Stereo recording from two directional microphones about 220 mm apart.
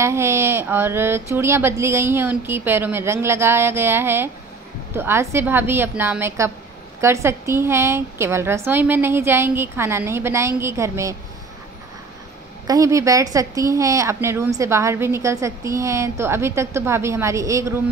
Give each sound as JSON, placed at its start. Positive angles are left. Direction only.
{"t": 0.0, "sound": "speech", "side_deg": -10}
{"t": 12.6, "sound": "speech", "side_deg": -15}